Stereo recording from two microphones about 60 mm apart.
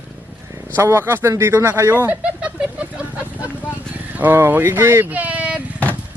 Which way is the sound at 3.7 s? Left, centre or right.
Right.